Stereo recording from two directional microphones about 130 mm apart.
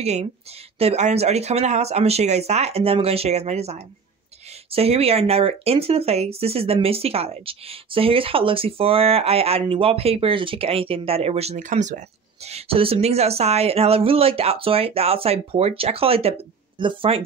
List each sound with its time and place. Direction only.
0.0 s speech: 55° right (ahead or behind)
12.4 s speech: 50° right (ahead or behind)